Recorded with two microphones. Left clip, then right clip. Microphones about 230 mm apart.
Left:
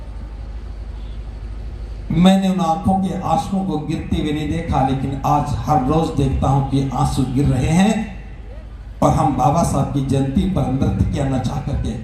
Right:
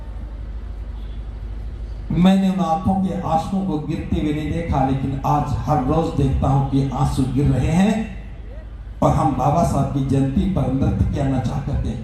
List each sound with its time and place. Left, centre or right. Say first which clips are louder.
2.1 s a man's voice: left 3 dB; left
9.0 s a man's voice: left 2 dB; left